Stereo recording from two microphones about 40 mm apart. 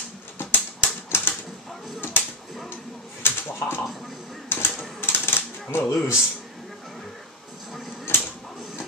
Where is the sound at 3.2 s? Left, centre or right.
Left.